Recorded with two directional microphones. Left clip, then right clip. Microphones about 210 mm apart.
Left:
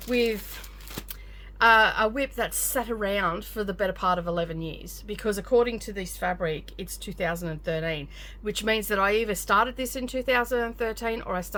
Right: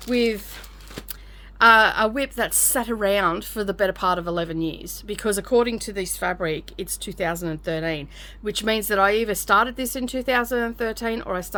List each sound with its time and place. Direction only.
0.1 s a woman's voice: 35° right (ahead or behind)
1.5 s a woman's voice: 35° right (ahead or behind)